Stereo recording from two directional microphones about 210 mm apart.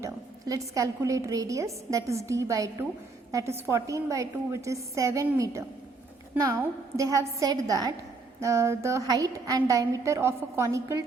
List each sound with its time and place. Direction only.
0.0 s a woman's voice: 15° right (ahead or behind)